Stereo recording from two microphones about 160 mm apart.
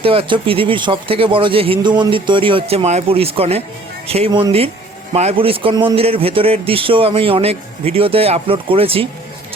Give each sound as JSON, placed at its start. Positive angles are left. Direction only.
{"t": 0.0, "sound": "a man's voice", "side_deg": -35}
{"t": 4.3, "sound": "speech", "side_deg": -25}
{"t": 5.1, "sound": "a man's voice", "side_deg": -40}